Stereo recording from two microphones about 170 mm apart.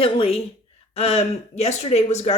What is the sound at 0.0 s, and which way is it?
Speech, 35° left (ahead or behind).